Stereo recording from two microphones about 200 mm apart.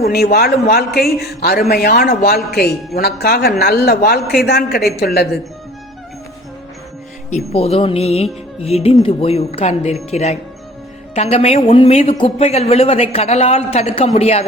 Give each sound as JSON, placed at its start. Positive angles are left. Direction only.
{"t": 0.0, "sound": "a man's voice", "side_deg": 50}
{"t": 7.3, "sound": "speech", "side_deg": 30}